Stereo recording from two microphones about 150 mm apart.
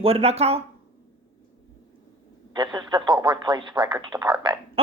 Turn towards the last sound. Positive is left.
turn(degrees=-30)  # may be behind; listen again after turning